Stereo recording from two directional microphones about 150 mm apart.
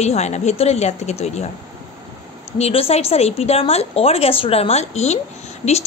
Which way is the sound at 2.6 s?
40° left (ahead or behind).